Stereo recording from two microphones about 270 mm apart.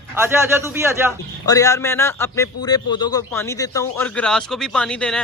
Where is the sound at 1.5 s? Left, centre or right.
Centre.